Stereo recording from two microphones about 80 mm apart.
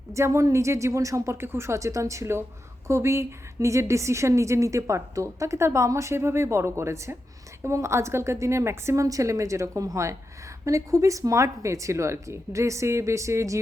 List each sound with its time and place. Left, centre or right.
0.1 s a woman's voice: right